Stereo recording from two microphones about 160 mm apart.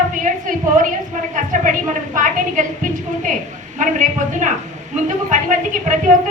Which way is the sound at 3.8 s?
50° right (ahead or behind).